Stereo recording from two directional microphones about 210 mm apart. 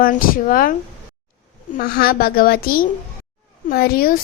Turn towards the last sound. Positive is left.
turn(degrees=45)  # may be behind; listen again after turning